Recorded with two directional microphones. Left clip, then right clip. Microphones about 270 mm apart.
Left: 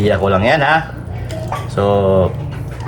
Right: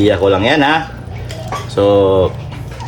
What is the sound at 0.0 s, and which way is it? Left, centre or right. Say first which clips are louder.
A man's voice: right 2 dB; right.